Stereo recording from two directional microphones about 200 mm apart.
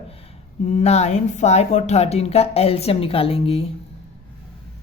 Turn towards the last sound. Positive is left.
turn(degrees=30)  # may be behind; listen again after turning